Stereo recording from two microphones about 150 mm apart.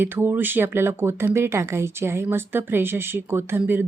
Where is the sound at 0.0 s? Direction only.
15° right (ahead or behind).